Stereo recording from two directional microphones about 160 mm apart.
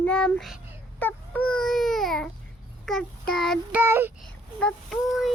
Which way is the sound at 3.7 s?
15° right (ahead or behind).